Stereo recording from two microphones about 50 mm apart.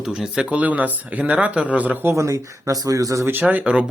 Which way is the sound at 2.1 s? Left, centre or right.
Right.